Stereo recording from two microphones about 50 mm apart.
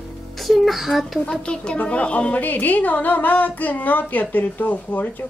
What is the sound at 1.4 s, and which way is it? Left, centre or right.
A woman's voice, centre.